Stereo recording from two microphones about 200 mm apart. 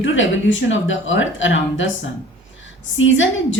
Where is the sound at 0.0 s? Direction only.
70° left (ahead or behind).